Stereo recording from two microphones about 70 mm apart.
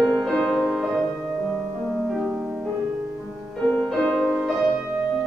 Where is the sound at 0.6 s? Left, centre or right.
Centre.